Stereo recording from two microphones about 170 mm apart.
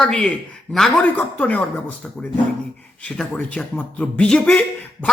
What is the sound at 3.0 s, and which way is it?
Speech, 5° left (ahead or behind).